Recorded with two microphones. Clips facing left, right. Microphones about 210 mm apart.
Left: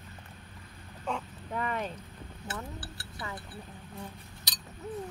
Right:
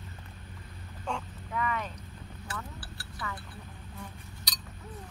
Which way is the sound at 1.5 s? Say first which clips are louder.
Even; 35° left (ahead or behind).